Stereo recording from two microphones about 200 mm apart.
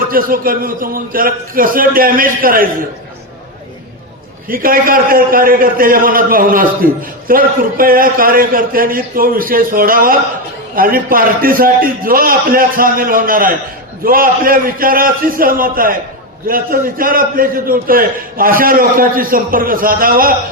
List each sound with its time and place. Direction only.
0.1 s a man's voice: 45° right (ahead or behind)
4.4 s a man's voice: 45° right (ahead or behind)